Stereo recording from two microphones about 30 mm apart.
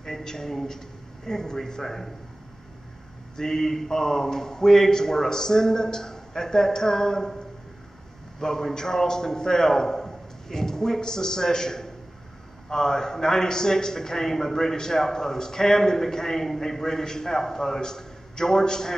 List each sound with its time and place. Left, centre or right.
0.0 s a man's voice: centre
3.3 s a man's voice: centre
8.4 s a man's voice: centre